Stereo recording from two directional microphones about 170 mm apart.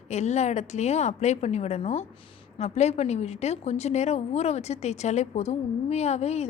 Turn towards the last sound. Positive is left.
turn(degrees=40)  # may be behind; listen again after turning